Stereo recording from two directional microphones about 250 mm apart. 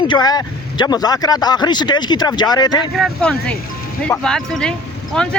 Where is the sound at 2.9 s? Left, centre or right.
Centre.